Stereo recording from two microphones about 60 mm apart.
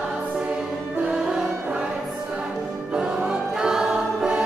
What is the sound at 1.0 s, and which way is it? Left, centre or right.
Music, centre.